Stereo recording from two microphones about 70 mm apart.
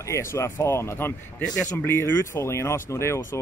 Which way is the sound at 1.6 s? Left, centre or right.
Left.